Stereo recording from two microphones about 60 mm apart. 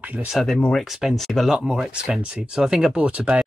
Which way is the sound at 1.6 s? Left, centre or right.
Centre.